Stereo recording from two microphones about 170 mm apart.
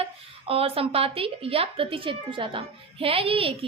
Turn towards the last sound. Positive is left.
turn(degrees=-35)  # may be behind; listen again after turning